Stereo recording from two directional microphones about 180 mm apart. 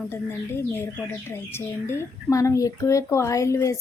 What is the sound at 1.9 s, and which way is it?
A woman's voice, 20° left (ahead or behind).